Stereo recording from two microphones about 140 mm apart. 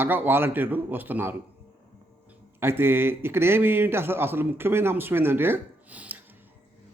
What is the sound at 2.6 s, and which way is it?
A man's voice, 15° right (ahead or behind).